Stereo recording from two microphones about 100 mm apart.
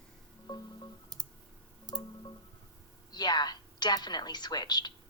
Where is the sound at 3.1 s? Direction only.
45° left (ahead or behind).